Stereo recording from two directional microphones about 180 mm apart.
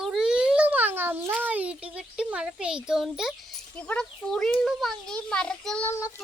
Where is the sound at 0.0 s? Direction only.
Centre (ahead or behind).